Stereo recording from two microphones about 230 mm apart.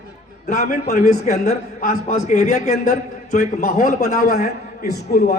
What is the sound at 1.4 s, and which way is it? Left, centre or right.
A man's voice, left.